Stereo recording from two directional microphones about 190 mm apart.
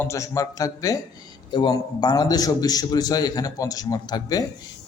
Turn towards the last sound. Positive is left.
turn(degrees=20)  # may be behind; listen again after turning